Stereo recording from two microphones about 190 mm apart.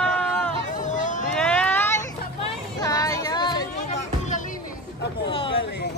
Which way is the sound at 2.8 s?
20° left (ahead or behind).